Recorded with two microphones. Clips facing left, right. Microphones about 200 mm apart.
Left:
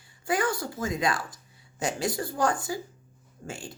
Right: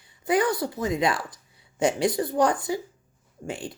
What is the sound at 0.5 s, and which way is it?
A woman's voice, 25° right (ahead or behind).